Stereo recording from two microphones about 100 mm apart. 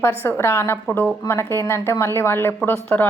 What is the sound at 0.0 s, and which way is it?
A woman's voice, 20° left (ahead or behind).